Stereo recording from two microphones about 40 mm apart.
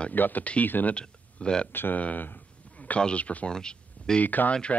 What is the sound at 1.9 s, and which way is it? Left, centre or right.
Speech, left.